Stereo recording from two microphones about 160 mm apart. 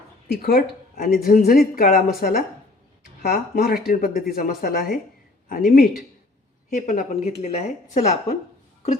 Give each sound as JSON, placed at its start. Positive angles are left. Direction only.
{"t": 0.3, "sound": "speech", "side_deg": 75}
{"t": 6.7, "sound": "speech", "side_deg": 50}